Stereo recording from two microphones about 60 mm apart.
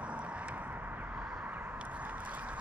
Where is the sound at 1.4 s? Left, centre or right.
Right.